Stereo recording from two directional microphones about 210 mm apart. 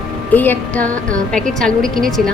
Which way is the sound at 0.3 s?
10° left (ahead or behind).